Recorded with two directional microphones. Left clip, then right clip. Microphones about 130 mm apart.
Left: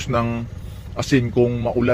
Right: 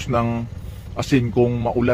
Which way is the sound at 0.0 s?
25° right (ahead or behind).